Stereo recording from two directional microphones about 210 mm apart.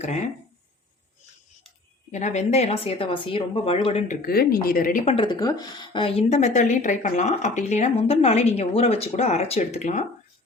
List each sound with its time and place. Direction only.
2.1 s a woman's voice: 35° left (ahead or behind)
4.3 s a woman's voice: 45° left (ahead or behind)